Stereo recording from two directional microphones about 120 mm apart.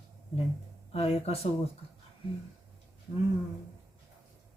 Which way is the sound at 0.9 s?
55° left (ahead or behind).